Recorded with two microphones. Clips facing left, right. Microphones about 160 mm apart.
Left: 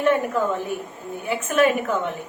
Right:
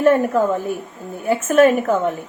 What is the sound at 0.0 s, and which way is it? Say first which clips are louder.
A woman's voice: right 5 dB; 40° right (ahead or behind).